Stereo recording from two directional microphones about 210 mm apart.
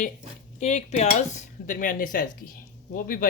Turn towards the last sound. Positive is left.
turn(degrees=45)  # may be behind; listen again after turning